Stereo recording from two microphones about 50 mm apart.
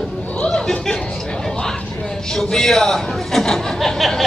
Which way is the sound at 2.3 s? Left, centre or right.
Centre.